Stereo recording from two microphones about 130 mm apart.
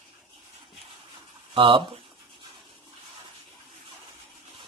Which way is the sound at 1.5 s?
40° right (ahead or behind).